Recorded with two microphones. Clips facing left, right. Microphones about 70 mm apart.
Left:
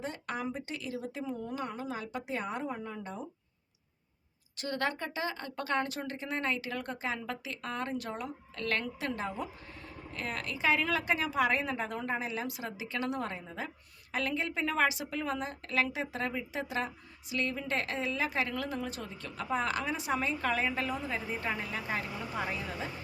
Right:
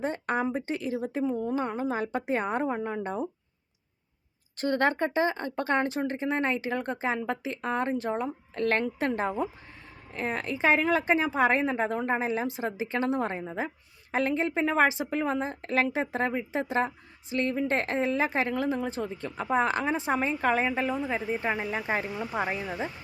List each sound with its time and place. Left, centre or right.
0.0 s a woman's voice: right
4.5 s a woman's voice: right